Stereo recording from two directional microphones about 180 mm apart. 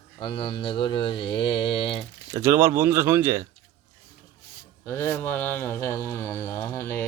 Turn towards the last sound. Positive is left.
turn(degrees=15)  # may be behind; listen again after turning